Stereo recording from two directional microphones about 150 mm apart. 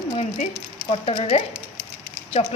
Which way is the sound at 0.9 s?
45° left (ahead or behind).